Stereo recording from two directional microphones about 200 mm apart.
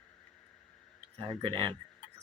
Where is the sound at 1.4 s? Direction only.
25° right (ahead or behind).